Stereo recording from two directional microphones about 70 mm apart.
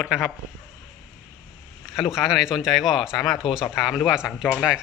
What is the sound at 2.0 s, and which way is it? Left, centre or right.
Speech, centre.